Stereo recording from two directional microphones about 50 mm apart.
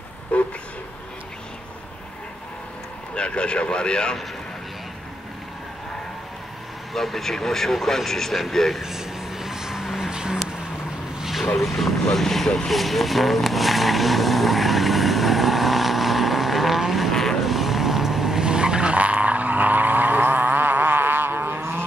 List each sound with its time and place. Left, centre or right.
0.3 s a sound: left
3.2 s speech: centre
6.9 s speech: centre
8.8 s vehicle: centre
11.5 s vehicle: centre
17.1 s vehicle: centre
17.4 s vehicle: centre; by 21.8 s right